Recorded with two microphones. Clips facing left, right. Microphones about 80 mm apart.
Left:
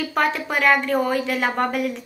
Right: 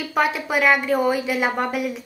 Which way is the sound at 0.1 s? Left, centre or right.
Centre.